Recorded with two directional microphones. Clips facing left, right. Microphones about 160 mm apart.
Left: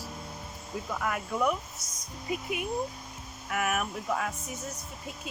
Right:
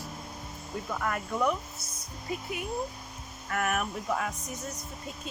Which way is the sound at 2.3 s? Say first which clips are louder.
Left 2 dB; 15° left (ahead or behind).